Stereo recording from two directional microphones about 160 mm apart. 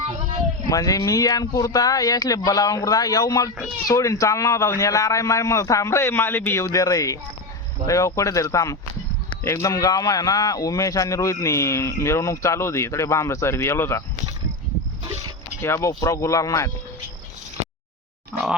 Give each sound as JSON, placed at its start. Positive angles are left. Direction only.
{"t": 0.7, "sound": "speech", "side_deg": 20}
{"t": 15.6, "sound": "speech", "side_deg": 15}